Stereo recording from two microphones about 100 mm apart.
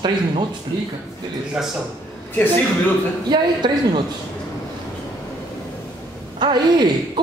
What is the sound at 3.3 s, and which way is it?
Speech, 45° right (ahead or behind).